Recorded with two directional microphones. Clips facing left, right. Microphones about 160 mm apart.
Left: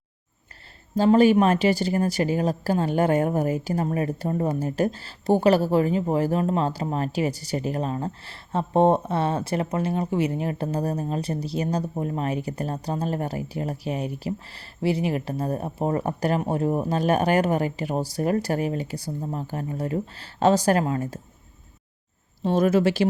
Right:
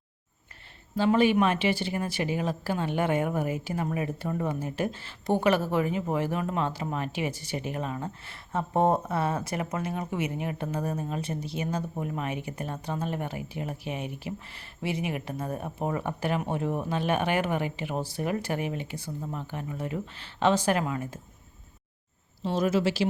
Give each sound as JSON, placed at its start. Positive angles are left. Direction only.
{"t": 0.9, "sound": "speech", "side_deg": 40}
{"t": 22.4, "sound": "speech", "side_deg": 50}